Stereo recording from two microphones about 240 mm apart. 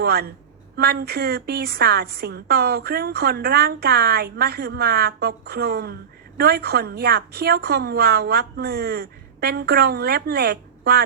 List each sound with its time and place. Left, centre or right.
0.0 s a woman's voice: right